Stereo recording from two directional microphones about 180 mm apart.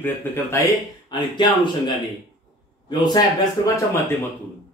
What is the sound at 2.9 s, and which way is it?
Speech, 25° left (ahead or behind).